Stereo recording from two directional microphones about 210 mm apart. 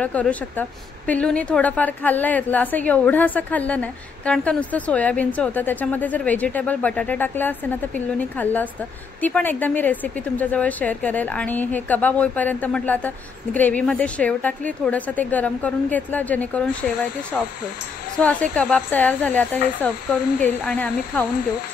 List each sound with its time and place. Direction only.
0.0 s a woman's voice: 5° left (ahead or behind)
18.1 s a woman's voice: 5° left (ahead or behind)